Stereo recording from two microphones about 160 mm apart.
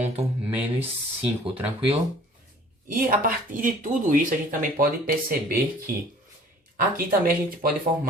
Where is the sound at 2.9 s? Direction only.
60° right (ahead or behind).